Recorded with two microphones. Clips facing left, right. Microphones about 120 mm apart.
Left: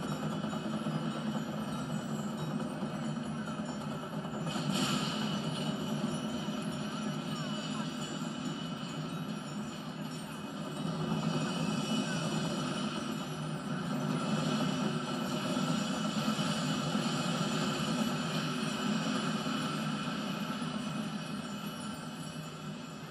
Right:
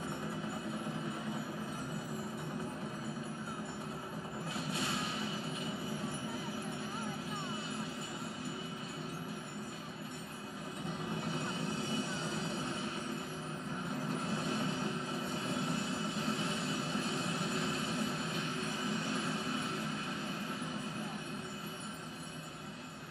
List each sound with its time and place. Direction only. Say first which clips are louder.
4.6 s music: left 4 dB; 20° left (ahead or behind)
11.1 s vehicle: left 4 dB; 20° left (ahead or behind)
14.0 s train: left 4 dB; 20° left (ahead or behind)
18.9 s a sound: left 4 dB; 20° left (ahead or behind)